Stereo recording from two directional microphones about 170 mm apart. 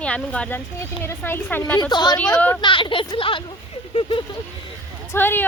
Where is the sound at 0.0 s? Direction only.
5° left (ahead or behind).